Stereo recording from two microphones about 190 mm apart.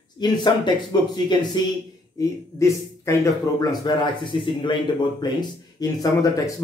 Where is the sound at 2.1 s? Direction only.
15° left (ahead or behind).